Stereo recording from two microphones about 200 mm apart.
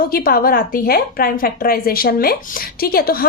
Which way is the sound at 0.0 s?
45° left (ahead or behind).